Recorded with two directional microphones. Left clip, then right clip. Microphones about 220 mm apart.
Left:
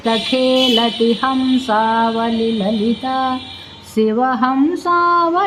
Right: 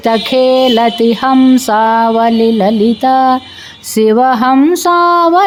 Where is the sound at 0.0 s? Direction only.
55° right (ahead or behind).